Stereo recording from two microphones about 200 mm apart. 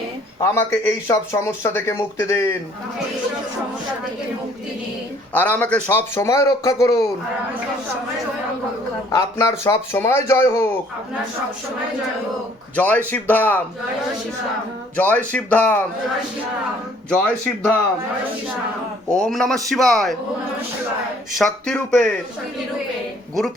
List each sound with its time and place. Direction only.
0.3 s a man's voice: 15° left (ahead or behind)
5.3 s a man's voice: 10° left (ahead or behind)
9.1 s a man's voice: 15° left (ahead or behind)
12.7 s a man's voice: 10° left (ahead or behind)
14.9 s a man's voice: 10° left (ahead or behind)
17.2 s a man's voice: 5° left (ahead or behind)
19.1 s a man's voice: 5° left (ahead or behind)
21.3 s a man's voice: 5° left (ahead or behind)